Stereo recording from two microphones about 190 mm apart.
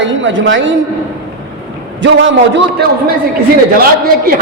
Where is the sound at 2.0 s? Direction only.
70° right (ahead or behind).